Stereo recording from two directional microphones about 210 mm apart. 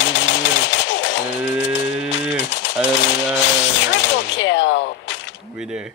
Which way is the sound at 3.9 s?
60° left (ahead or behind).